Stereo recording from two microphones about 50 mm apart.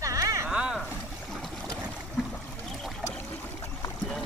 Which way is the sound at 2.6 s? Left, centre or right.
Centre.